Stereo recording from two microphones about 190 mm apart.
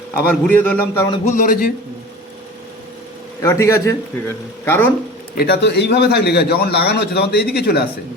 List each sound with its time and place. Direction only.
0.4 s a man's voice: 10° left (ahead or behind)
1.1 s a man's voice: 35° left (ahead or behind)
3.4 s a man's voice: 15° left (ahead or behind)
5.3 s a man's voice: 55° left (ahead or behind)